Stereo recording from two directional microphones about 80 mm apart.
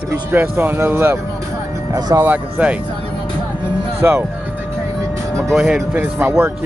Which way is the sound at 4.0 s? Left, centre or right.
Right.